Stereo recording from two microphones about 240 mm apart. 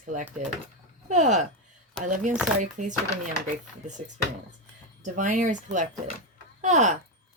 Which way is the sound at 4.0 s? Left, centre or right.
Right.